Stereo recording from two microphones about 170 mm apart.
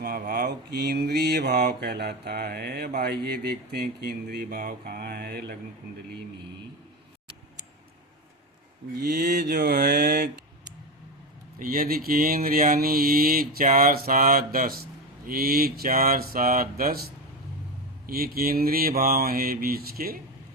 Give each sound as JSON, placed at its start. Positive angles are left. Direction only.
{"t": 0.0, "sound": "mantra", "side_deg": -65}
{"t": 9.0, "sound": "mantra", "side_deg": -65}
{"t": 11.6, "sound": "mantra", "side_deg": -55}